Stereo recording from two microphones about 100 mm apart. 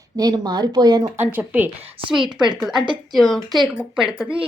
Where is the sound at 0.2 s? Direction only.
45° right (ahead or behind).